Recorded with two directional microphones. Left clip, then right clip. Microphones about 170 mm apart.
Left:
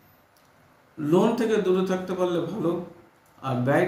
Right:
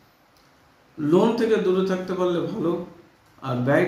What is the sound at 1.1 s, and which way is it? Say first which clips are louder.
A man's voice: right 3 dB; 15° left (ahead or behind).